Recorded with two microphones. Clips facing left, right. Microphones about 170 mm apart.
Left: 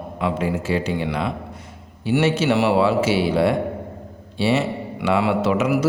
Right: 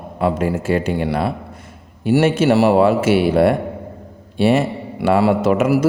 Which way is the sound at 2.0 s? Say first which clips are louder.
Right 4 dB; 50° right (ahead or behind).